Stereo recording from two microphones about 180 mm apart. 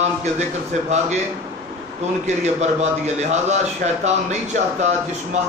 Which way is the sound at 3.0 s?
40° right (ahead or behind).